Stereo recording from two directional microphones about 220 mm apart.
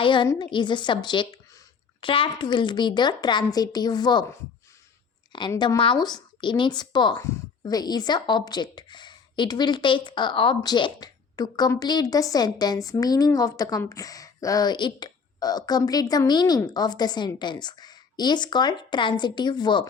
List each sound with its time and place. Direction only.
0.0 s speech: 20° left (ahead or behind)